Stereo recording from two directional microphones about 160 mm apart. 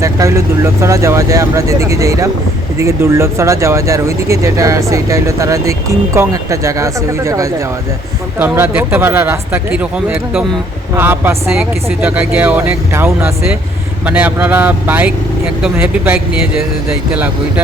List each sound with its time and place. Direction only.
0.0 s speech: 20° right (ahead or behind)